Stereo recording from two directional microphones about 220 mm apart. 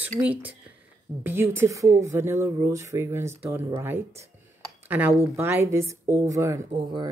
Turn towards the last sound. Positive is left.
turn(degrees=-20)  # may be behind; listen again after turning